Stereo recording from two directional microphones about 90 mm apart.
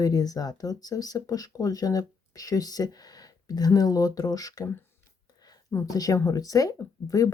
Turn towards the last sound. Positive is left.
turn(degrees=40)  # may be behind; listen again after turning